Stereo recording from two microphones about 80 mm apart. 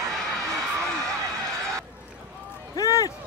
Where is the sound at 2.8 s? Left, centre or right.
Left.